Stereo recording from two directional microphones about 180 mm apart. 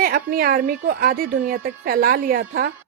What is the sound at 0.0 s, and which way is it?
A woman's voice, 55° right (ahead or behind).